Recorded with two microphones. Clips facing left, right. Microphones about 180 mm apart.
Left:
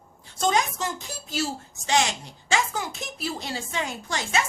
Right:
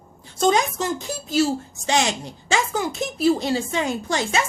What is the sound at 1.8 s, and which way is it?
Speech, 25° right (ahead or behind).